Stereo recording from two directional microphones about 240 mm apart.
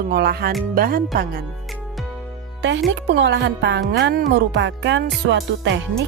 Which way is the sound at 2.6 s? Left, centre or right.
Right.